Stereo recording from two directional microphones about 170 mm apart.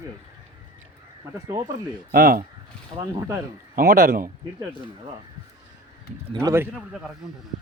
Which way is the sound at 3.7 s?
55° right (ahead or behind).